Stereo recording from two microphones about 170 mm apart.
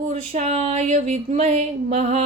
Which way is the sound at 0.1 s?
40° right (ahead or behind).